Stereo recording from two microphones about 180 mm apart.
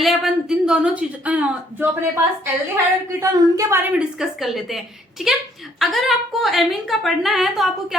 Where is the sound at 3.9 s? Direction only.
Centre (ahead or behind).